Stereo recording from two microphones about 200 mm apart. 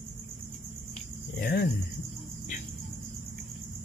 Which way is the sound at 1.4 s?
45° left (ahead or behind).